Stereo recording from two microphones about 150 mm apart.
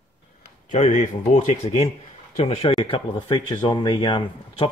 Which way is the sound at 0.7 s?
50° left (ahead or behind).